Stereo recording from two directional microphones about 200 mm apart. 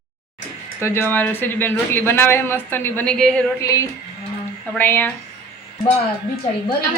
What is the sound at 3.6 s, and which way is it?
Speech, 15° left (ahead or behind).